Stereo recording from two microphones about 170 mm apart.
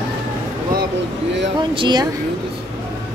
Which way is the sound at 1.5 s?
25° right (ahead or behind).